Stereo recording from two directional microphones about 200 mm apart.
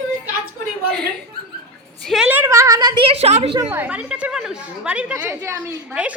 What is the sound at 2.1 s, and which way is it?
A woman's voice, 5° right (ahead or behind).